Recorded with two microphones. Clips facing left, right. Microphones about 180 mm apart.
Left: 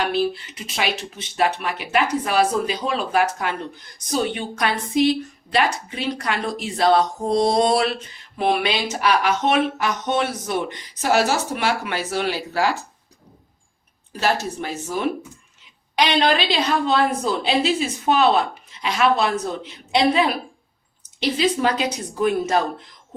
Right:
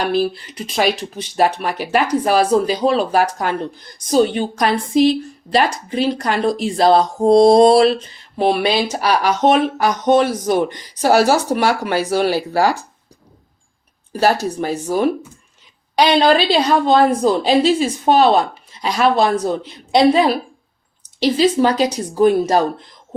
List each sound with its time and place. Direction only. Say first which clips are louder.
0.0 s speech: right 3 dB; 35° right (ahead or behind)
14.1 s speech: right 6 dB; 40° right (ahead or behind)